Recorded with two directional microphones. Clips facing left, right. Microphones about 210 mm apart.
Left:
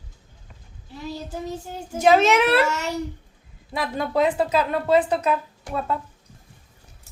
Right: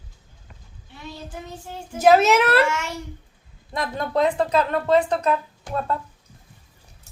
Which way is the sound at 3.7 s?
5° left (ahead or behind).